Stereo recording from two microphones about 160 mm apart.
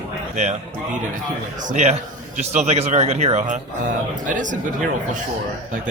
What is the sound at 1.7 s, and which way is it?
Speech, 45° right (ahead or behind).